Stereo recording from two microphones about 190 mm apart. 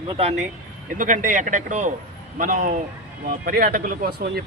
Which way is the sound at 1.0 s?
40° right (ahead or behind).